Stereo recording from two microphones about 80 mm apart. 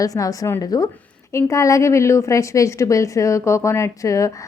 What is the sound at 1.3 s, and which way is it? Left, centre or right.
A woman's voice, left.